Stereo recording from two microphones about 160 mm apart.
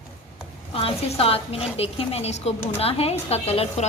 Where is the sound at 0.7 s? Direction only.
35° left (ahead or behind).